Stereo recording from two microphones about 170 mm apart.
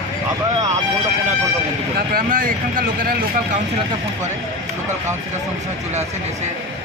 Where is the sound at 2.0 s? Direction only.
55° right (ahead or behind).